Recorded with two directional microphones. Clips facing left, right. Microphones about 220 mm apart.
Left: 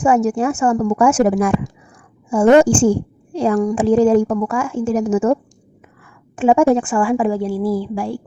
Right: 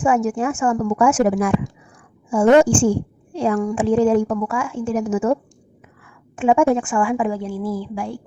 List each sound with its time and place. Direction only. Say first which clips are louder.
0.0 s a woman's voice: left 3 dB; 40° left (ahead or behind)
2.6 s a woman's voice: left 2 dB; 40° left (ahead or behind)